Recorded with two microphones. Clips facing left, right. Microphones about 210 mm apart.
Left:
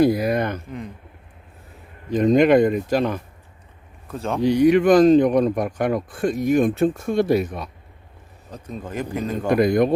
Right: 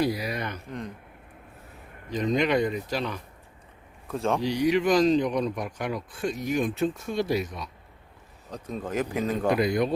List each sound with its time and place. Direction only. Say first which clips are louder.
0.0 s speech: left 9 dB; 50° left (ahead or behind)
2.0 s speech: left 9 dB; 50° left (ahead or behind)
4.1 s a man's voice: even; centre (ahead or behind)
4.4 s speech: left 11 dB; 55° left (ahead or behind)
8.4 s a man's voice: even; centre (ahead or behind)
9.5 s speech: left 8 dB; 50° left (ahead or behind)